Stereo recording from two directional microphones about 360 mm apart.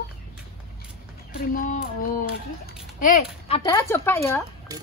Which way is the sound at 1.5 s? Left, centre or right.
Left.